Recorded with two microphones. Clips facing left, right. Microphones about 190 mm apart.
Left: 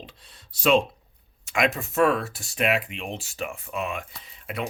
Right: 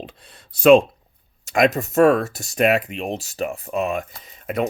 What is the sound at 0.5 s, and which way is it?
Speech, 55° right (ahead or behind).